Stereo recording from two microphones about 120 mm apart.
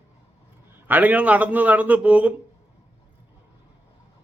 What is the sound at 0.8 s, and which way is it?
A man's voice, 15° right (ahead or behind).